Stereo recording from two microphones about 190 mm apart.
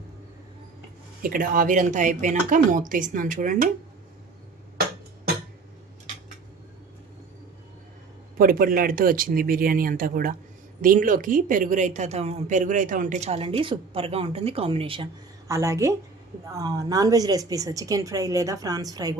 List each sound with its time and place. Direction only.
1.2 s a woman's voice: 45° right (ahead or behind)
8.4 s a woman's voice: 50° right (ahead or behind); by 15.0 s 30° right (ahead or behind)
15.4 s a woman's voice: 15° right (ahead or behind)